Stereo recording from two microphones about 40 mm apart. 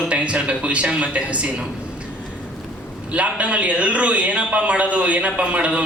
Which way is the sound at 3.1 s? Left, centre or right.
Right.